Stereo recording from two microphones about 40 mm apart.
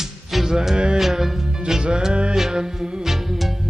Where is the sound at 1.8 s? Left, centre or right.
Right; by 3.5 s centre.